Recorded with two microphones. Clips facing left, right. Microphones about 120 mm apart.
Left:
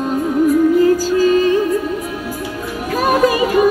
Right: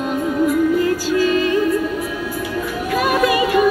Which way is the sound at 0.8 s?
35° left (ahead or behind).